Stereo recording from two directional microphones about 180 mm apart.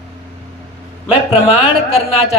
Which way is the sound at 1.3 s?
30° left (ahead or behind).